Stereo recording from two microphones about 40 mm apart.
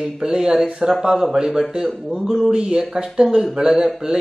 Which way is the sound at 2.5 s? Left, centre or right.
Centre.